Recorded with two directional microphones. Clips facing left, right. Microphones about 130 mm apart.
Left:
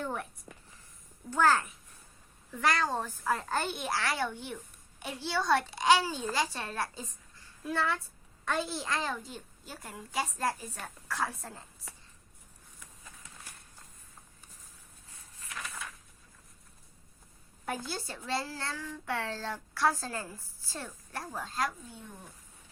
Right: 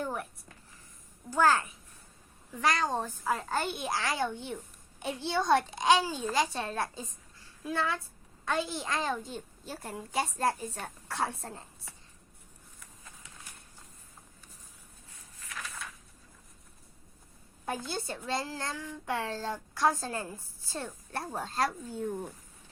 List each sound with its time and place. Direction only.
0.0 s speech: 10° right (ahead or behind)
0.5 s a sound: 20° left (ahead or behind)
1.3 s a child's voice: 10° right (ahead or behind); by 11.6 s 30° right (ahead or behind)
17.7 s a child's voice: 20° right (ahead or behind); by 22.3 s 45° right (ahead or behind)